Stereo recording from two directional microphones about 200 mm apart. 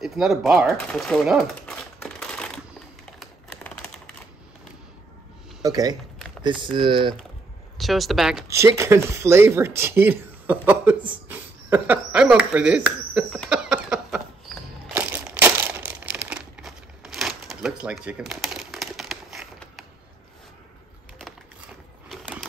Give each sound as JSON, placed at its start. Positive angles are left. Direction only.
{"t": 0.0, "sound": "typewriter", "side_deg": 0}
{"t": 3.2, "sound": "typing", "side_deg": 5}
{"t": 5.6, "sound": "speech", "side_deg": -20}
{"t": 7.7, "sound": "speech", "side_deg": 0}
{"t": 8.5, "sound": "speech", "side_deg": -15}
{"t": 13.5, "sound": "a sound", "side_deg": -5}
{"t": 16.3, "sound": "crumpling", "side_deg": -5}
{"t": 22.1, "sound": "a sound", "side_deg": 0}